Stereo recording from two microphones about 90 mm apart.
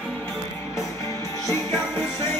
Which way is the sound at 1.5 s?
30° left (ahead or behind).